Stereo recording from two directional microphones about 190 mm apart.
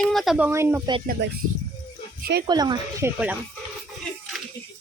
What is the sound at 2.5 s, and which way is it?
Speech, 20° right (ahead or behind).